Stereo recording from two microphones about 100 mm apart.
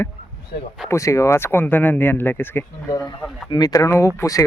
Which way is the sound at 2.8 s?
35° left (ahead or behind).